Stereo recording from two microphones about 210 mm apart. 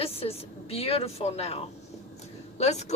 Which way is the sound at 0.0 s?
30° left (ahead or behind).